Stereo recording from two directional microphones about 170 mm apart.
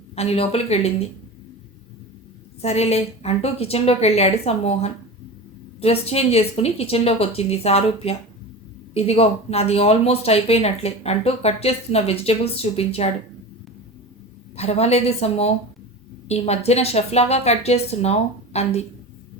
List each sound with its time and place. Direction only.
0.2 s speech: 35° left (ahead or behind)
2.6 s speech: 40° left (ahead or behind)
14.5 s speech: 35° left (ahead or behind)